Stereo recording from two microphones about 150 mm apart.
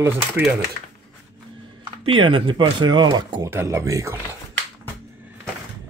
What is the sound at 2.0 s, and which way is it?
Speech, 35° right (ahead or behind).